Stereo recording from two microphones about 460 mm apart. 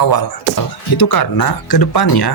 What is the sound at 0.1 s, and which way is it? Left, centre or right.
Speech, left.